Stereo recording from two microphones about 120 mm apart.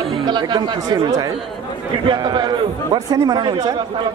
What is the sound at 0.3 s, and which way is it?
A man's voice, 40° right (ahead or behind).